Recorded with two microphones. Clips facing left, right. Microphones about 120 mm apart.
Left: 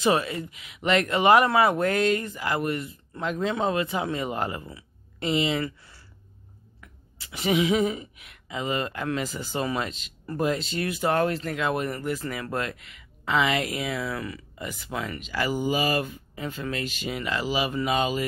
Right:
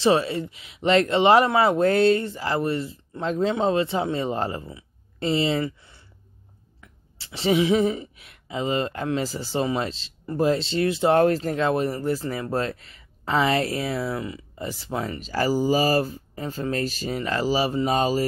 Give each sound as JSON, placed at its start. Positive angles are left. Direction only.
{"t": 0.0, "sound": "speech", "side_deg": -30}
{"t": 6.8, "sound": "speech", "side_deg": -30}